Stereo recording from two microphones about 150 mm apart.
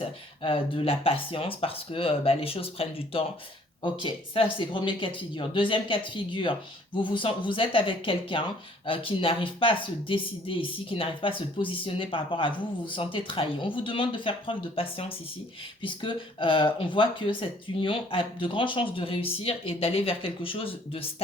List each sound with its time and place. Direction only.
0.0 s speech: 35° left (ahead or behind)